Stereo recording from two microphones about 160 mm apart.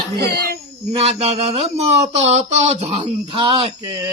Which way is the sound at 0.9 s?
40° right (ahead or behind).